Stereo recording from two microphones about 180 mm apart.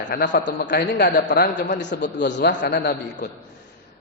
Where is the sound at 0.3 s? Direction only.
75° left (ahead or behind).